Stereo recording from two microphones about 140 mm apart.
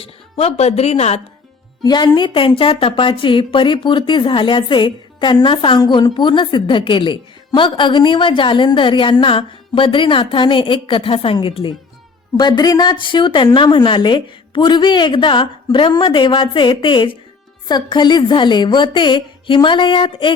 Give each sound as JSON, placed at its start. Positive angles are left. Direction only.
{"t": 0.0, "sound": "speech", "side_deg": 45}
{"t": 1.8, "sound": "a woman's voice", "side_deg": 30}